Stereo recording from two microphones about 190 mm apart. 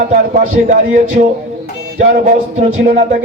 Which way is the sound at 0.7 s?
40° right (ahead or behind).